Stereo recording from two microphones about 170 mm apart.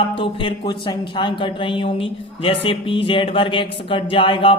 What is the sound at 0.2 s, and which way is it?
A man's voice, 30° left (ahead or behind).